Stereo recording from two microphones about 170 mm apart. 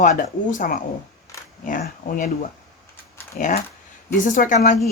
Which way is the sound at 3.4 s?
50° left (ahead or behind).